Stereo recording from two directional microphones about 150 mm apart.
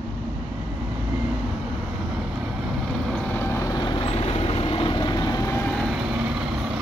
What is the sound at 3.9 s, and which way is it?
Vehicle, 40° left (ahead or behind).